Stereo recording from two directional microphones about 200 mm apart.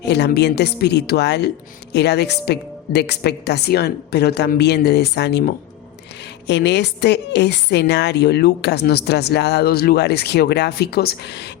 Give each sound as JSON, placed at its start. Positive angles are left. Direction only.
{"t": 0.0, "sound": "a woman's voice", "side_deg": 60}